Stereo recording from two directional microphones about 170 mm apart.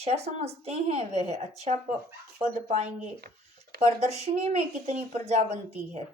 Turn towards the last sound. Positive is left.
turn(degrees=-40)  # may be behind; listen again after turning